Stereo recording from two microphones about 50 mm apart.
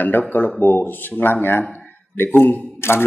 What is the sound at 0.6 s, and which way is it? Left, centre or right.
A man's voice, left.